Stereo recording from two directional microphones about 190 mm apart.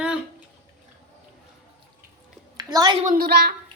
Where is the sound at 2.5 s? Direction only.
20° right (ahead or behind).